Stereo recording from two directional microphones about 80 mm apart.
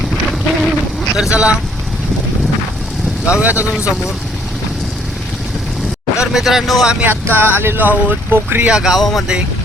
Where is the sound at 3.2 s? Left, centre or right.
Centre.